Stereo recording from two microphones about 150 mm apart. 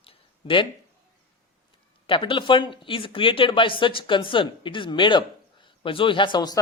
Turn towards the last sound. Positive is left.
turn(degrees=30)  # may be behind; listen again after turning